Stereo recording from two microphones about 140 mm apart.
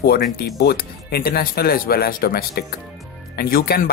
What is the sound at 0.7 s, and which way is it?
Speech, 90° left.